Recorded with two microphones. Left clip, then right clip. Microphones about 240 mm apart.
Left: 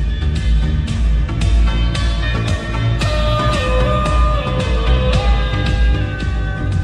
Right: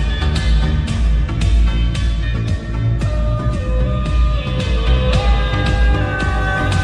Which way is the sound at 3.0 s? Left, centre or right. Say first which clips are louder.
Left 9 dB; left.